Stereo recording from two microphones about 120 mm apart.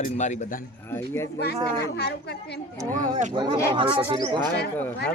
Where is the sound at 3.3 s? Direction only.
40° right (ahead or behind).